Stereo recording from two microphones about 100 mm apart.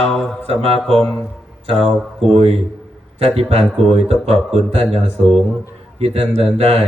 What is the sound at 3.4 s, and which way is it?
Speech, 90° right.